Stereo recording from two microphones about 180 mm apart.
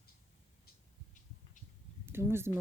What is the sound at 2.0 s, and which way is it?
Speech, 15° right (ahead or behind).